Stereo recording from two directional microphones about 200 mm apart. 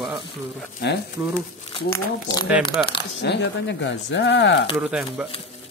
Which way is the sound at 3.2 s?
60° left (ahead or behind).